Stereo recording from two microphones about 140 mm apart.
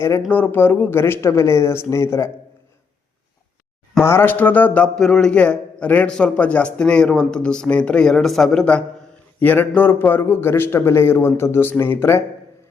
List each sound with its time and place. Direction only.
0.3 s a man's voice: 15° left (ahead or behind)
4.0 s a man's voice: 15° left (ahead or behind)